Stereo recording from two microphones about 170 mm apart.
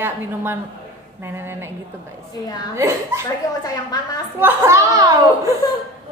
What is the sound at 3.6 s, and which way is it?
Speech, 20° left (ahead or behind).